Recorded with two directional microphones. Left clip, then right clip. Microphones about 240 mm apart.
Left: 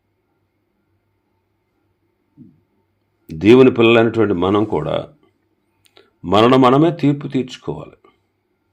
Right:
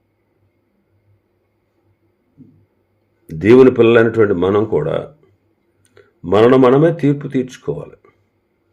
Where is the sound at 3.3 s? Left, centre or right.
Left.